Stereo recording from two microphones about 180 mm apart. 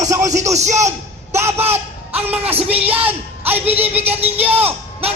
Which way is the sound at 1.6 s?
35° right (ahead or behind).